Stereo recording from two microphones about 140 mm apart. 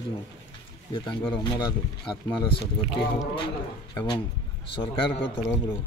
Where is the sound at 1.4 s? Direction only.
30° left (ahead or behind).